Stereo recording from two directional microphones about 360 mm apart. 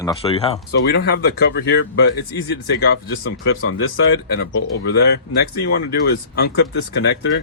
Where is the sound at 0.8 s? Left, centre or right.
Left.